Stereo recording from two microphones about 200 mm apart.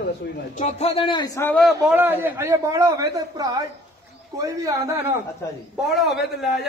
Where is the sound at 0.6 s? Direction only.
35° left (ahead or behind); by 1.7 s 10° left (ahead or behind).